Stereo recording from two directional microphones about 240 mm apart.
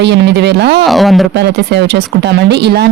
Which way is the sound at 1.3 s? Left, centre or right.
Right.